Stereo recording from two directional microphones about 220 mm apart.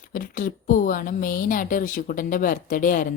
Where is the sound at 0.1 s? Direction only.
40° left (ahead or behind).